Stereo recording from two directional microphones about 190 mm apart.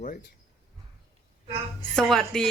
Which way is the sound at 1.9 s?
Centre (ahead or behind).